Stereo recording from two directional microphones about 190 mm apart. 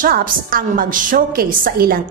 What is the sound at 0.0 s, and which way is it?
A woman's voice, 50° right (ahead or behind).